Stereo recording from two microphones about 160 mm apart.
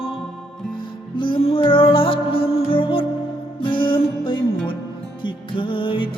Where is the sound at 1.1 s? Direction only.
30° left (ahead or behind).